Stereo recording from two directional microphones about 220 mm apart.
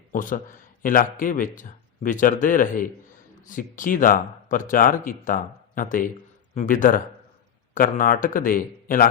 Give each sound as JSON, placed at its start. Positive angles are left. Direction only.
{"t": 0.1, "sound": "speech", "side_deg": 40}